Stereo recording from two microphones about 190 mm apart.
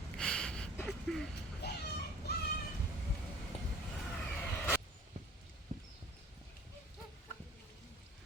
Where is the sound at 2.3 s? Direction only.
60° left (ahead or behind).